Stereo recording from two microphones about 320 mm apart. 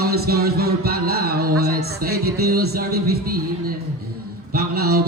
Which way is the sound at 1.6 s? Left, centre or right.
Right.